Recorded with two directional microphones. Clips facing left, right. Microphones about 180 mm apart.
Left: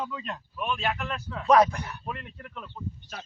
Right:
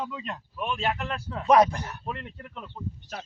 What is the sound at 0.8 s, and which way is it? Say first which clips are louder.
Speech: right 1 dB; 30° right (ahead or behind).